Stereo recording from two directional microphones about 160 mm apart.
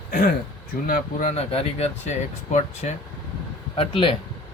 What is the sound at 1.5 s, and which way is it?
Speech, 40° left (ahead or behind).